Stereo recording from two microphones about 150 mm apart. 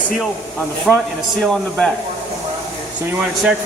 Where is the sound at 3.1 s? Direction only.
10° right (ahead or behind).